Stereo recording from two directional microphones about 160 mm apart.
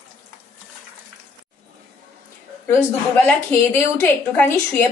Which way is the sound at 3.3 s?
15° left (ahead or behind).